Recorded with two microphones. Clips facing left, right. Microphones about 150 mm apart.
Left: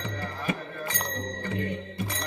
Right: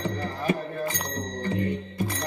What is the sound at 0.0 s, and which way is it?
Music, 35° right (ahead or behind).